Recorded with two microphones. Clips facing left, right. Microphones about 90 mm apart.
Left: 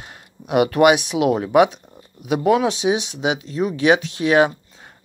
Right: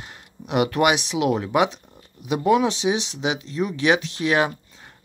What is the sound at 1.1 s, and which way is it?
Speech, 25° left (ahead or behind).